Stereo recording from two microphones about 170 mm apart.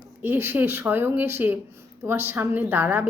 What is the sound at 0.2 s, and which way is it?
A woman's voice, 15° right (ahead or behind).